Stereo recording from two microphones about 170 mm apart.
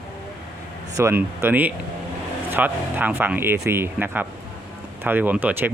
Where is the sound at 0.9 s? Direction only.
15° right (ahead or behind).